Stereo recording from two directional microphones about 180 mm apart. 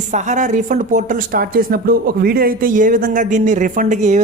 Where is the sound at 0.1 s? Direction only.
45° right (ahead or behind).